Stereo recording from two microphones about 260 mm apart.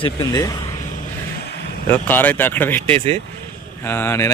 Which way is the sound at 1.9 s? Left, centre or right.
Centre.